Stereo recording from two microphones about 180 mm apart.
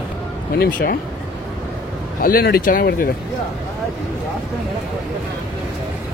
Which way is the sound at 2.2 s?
55° left (ahead or behind).